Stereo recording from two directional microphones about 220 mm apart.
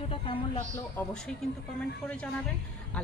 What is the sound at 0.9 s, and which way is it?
Speech, 5° left (ahead or behind).